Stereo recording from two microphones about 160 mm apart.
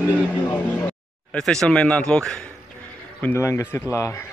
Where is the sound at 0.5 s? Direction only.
10° left (ahead or behind).